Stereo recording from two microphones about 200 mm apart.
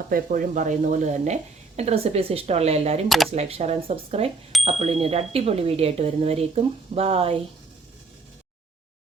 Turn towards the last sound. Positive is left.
turn(degrees=-30)  # may be behind; listen again after turning